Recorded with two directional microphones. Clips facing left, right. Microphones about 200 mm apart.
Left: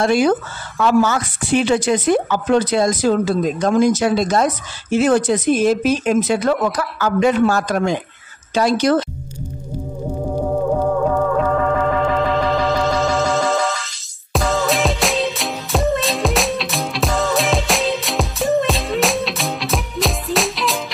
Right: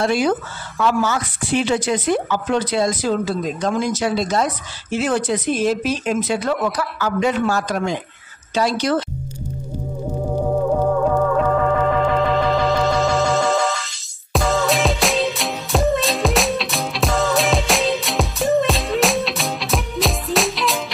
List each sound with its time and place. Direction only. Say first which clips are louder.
0.0 s speech: left 3 dB; 50° left (ahead or behind)
11.3 s music: even; centre (ahead or behind)